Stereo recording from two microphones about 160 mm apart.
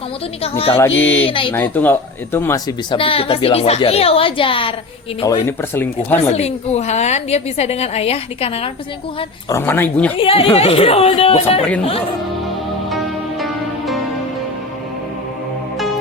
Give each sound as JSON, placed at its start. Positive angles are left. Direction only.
{"t": 0.9, "sound": "speech", "side_deg": 10}
{"t": 1.3, "sound": "a woman's voice", "side_deg": 30}
{"t": 1.5, "sound": "speech", "side_deg": 10}
{"t": 2.9, "sound": "a woman's voice", "side_deg": 35}
{"t": 5.2, "sound": "speech", "side_deg": 15}
{"t": 6.3, "sound": "a woman's voice", "side_deg": 45}
{"t": 9.5, "sound": "speech", "side_deg": 15}
{"t": 10.2, "sound": "a woman's voice", "side_deg": 35}
{"t": 13.4, "sound": "music", "side_deg": 0}